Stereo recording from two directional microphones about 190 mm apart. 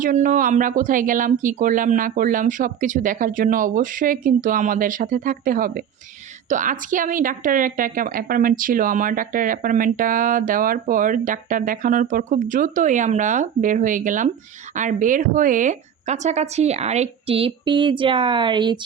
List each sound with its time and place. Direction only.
0.0 s a woman's voice: 45° right (ahead or behind); by 18.8 s 25° right (ahead or behind)